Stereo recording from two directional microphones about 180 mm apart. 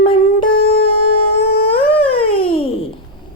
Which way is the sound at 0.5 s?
55° left (ahead or behind).